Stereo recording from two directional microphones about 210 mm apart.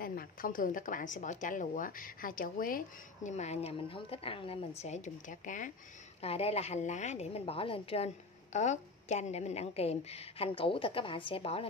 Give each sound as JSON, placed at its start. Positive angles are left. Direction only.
{"t": 0.0, "sound": "a woman's voice", "side_deg": 45}